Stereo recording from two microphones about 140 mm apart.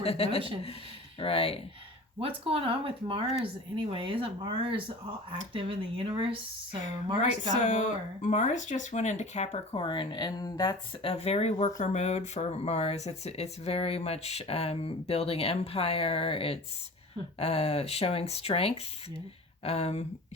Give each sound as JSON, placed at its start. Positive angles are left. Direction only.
{"t": 0.0, "sound": "speech", "side_deg": 45}
{"t": 2.2, "sound": "speech", "side_deg": -40}
{"t": 7.5, "sound": "speech", "side_deg": 60}
{"t": 9.8, "sound": "speech", "side_deg": 35}
{"t": 11.1, "sound": "speech", "side_deg": 45}